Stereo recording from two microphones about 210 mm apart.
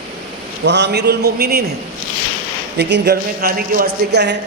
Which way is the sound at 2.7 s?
55° right (ahead or behind).